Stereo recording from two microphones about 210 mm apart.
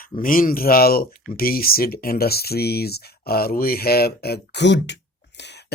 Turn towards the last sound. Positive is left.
turn(degrees=55)  # may be behind; listen again after turning